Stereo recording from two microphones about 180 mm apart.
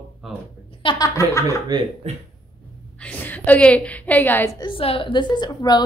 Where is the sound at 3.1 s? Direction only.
10° left (ahead or behind).